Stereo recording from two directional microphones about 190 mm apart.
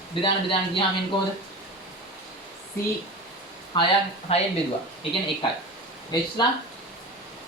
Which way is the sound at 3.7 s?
25° left (ahead or behind).